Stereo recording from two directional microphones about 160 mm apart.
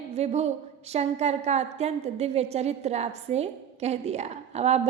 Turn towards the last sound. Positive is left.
turn(degrees=-45)  # may be behind; listen again after turning